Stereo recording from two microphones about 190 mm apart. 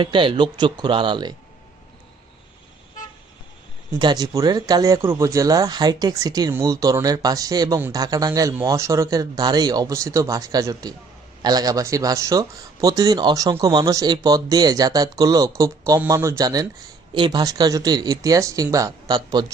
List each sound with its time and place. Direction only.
0.0 s speech: 25° right (ahead or behind)
3.9 s speech: 20° right (ahead or behind)